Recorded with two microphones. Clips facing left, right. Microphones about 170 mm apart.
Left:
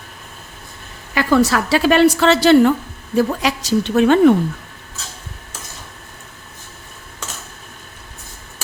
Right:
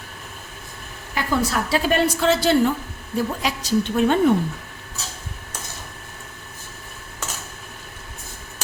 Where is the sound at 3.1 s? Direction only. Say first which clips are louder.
Left 7 dB; 90° left.